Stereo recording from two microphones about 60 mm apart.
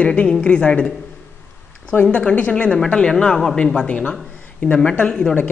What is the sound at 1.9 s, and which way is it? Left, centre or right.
Speech, left.